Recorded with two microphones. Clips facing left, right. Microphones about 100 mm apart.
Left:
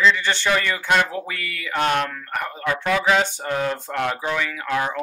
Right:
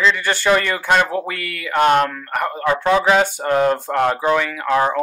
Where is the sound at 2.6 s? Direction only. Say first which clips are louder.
Right 5 dB; 30° right (ahead or behind).